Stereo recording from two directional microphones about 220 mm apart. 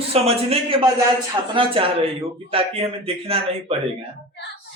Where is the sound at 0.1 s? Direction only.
25° right (ahead or behind).